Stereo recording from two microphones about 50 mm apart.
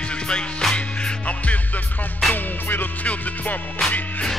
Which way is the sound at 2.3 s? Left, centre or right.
Left.